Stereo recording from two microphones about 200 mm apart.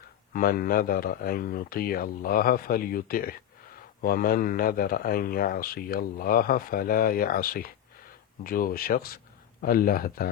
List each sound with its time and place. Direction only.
0.3 s a man's voice: 45° left (ahead or behind)